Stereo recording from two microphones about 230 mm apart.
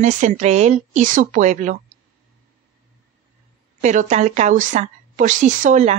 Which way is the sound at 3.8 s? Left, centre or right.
Right.